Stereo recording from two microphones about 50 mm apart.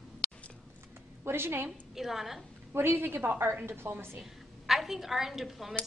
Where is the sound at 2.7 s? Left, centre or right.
Right.